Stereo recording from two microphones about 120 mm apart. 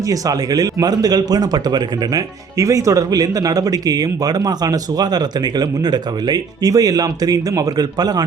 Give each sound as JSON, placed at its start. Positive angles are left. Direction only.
{"t": 0.0, "sound": "speech", "side_deg": -30}